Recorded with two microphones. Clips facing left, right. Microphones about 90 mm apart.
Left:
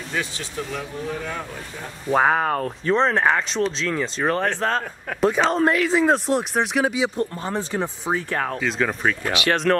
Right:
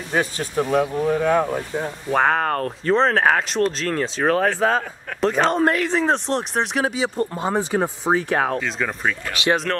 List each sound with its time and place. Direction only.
0.1 s speech: 45° right (ahead or behind)
2.1 s speech: 5° left (ahead or behind)
7.3 s speech: 15° right (ahead or behind)
8.5 s speech: centre (ahead or behind)